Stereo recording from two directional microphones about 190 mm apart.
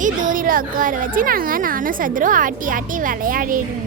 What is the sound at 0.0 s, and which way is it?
Speech, 40° right (ahead or behind).